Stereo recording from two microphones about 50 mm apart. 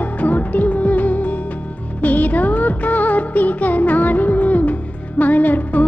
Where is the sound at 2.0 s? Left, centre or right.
Left.